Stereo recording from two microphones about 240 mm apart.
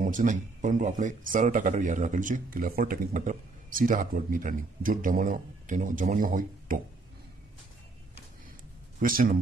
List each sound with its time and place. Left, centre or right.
0.0 s speech: right
9.0 s speech: right